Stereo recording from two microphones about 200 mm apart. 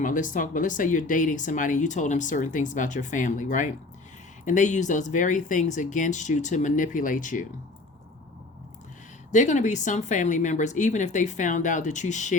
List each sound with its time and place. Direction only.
0.0 s speech: 40° left (ahead or behind)
9.3 s speech: 35° left (ahead or behind)